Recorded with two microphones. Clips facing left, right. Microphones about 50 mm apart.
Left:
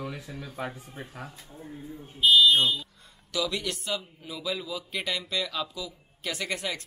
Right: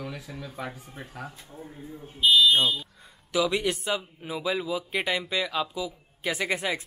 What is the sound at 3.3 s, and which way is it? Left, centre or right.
A man's voice, right.